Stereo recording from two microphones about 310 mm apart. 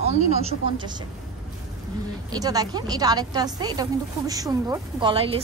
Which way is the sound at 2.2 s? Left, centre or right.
Centre.